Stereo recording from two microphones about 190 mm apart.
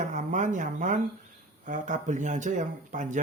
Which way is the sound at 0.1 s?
40° right (ahead or behind).